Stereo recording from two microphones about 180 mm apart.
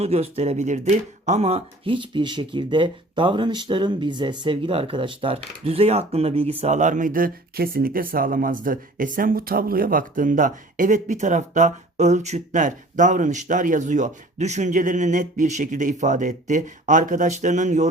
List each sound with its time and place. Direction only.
0.0 s speech: 35° right (ahead or behind)